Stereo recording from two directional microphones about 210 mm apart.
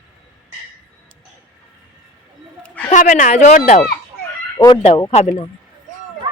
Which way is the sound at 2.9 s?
40° left (ahead or behind).